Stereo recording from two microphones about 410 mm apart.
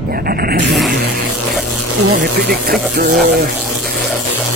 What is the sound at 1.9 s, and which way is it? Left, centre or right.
Speech, right.